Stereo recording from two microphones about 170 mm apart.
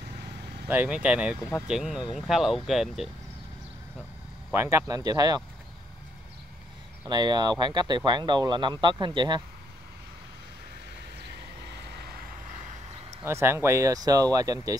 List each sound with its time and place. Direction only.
0.7 s speech: 10° right (ahead or behind)
4.5 s speech: 15° right (ahead or behind)
7.1 s speech: 25° right (ahead or behind)
11.2 s vehicle: 75° right (ahead or behind)
13.2 s speech: 15° right (ahead or behind)